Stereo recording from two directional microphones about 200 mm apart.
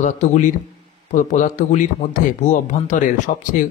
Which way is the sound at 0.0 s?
40° left (ahead or behind).